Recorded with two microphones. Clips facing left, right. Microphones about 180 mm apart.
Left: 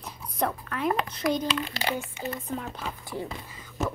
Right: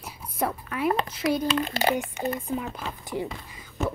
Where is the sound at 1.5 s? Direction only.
50° right (ahead or behind).